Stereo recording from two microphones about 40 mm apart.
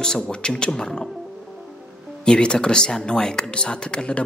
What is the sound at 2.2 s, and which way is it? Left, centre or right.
Speech, left.